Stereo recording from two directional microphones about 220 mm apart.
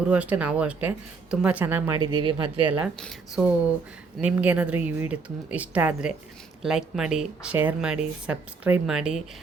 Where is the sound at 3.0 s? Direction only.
5° right (ahead or behind).